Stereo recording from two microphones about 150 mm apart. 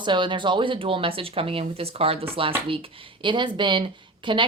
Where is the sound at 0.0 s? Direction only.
30° right (ahead or behind).